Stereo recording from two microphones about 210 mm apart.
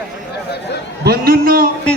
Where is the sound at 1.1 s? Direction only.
45° right (ahead or behind).